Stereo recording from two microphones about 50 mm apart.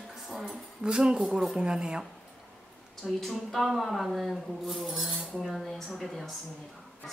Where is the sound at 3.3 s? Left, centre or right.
Centre.